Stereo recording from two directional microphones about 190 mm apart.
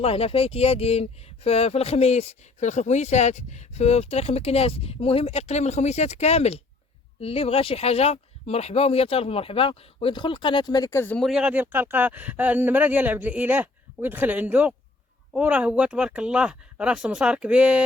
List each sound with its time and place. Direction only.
0.0 s speech: 30° left (ahead or behind); by 11.3 s 10° left (ahead or behind)
11.3 s speech: 5° right (ahead or behind)